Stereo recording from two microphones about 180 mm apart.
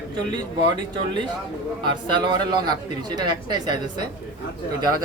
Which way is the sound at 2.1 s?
25° right (ahead or behind).